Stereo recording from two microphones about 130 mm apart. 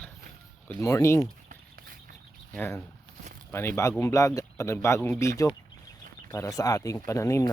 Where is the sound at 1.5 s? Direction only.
90° right.